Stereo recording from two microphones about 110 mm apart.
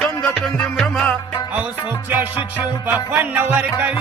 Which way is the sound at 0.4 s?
5° left (ahead or behind).